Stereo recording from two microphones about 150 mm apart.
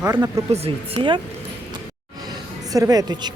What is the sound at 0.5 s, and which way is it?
Speech, 40° right (ahead or behind).